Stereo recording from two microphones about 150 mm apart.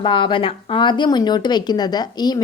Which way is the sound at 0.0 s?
35° left (ahead or behind).